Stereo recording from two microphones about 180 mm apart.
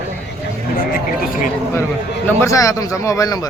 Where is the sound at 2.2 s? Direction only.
15° left (ahead or behind).